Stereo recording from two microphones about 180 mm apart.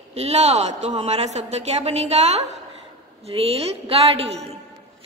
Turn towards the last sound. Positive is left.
turn(degrees=-35)  # may be behind; listen again after turning